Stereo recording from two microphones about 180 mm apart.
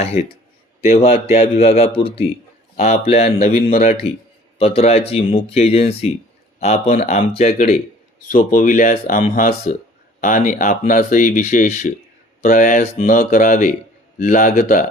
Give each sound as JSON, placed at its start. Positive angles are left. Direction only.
{"t": 0.0, "sound": "a man's voice", "side_deg": 35}
{"t": 8.3, "sound": "speech", "side_deg": 50}